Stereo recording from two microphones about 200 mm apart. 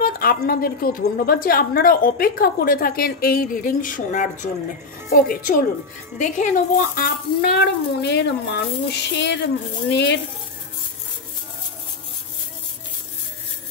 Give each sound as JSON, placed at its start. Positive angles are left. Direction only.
{"t": 0.0, "sound": "a sound", "side_deg": 45}
{"t": 0.5, "sound": "a woman's voice", "side_deg": 45}
{"t": 7.4, "sound": "a child's voice", "side_deg": 55}